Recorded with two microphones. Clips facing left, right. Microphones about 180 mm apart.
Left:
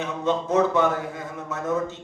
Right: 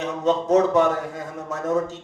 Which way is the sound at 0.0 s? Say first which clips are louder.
Right 3 dB; 40° right (ahead or behind).